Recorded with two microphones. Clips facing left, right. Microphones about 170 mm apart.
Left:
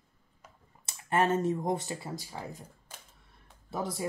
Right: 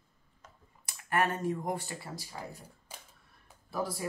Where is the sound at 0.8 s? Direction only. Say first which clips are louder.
Left 3 dB; 25° left (ahead or behind).